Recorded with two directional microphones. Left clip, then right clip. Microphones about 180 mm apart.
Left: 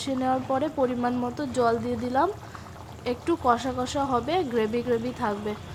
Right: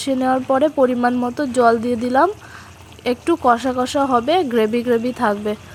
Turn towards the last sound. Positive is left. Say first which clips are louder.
# right 10 dB
turn(degrees=-35)  # may be behind; listen again after turning